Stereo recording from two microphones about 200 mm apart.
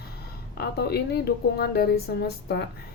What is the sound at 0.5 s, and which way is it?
A woman's voice, 55° left (ahead or behind).